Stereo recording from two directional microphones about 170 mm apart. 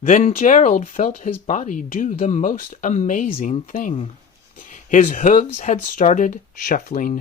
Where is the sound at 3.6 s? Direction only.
50° left (ahead or behind).